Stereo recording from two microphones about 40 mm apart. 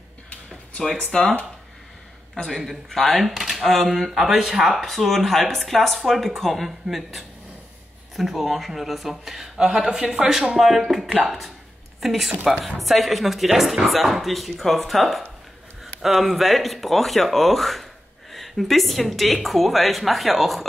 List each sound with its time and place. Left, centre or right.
0.7 s speech: centre
1.1 s speech: left
2.5 s speech: centre